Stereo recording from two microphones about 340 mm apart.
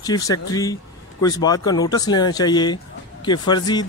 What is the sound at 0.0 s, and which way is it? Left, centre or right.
Speech, centre.